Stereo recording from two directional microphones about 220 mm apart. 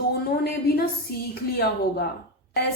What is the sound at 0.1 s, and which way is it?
A woman's voice, 45° left (ahead or behind).